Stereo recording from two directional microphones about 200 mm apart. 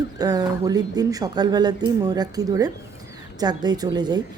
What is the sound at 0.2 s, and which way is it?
A woman's voice, 20° right (ahead or behind).